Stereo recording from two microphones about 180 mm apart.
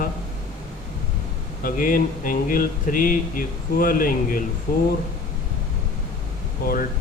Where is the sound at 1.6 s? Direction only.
50° left (ahead or behind).